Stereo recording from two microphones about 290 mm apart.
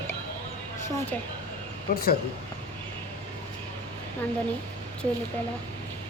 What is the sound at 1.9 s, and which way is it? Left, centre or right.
Speech, left.